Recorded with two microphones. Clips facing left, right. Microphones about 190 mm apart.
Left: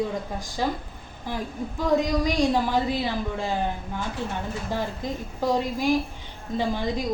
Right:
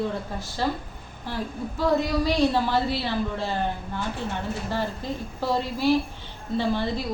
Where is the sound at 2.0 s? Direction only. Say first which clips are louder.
Even; 15° left (ahead or behind).